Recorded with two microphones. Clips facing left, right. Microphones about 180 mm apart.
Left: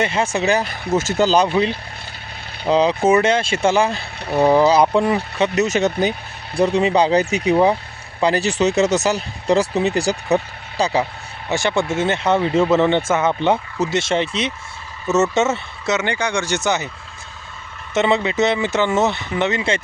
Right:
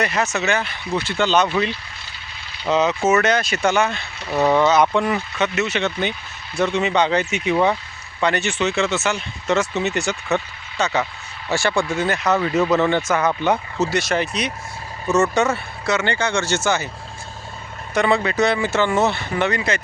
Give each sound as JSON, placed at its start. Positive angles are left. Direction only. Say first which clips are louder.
{"t": 0.0, "sound": "speech", "louder": "left 2 dB", "side_deg": 30}
{"t": 2.6, "sound": "speech", "louder": "left 3 dB", "side_deg": 30}
{"t": 11.4, "sound": "speech", "louder": "left 1 dB", "side_deg": 20}
{"t": 17.9, "sound": "speech", "louder": "left 1 dB", "side_deg": 20}